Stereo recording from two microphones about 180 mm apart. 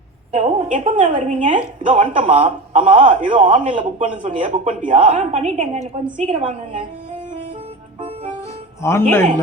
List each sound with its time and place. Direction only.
0.3 s a woman's voice: 40° right (ahead or behind)
8.0 s music: 35° right (ahead or behind)
8.8 s speech: 15° left (ahead or behind)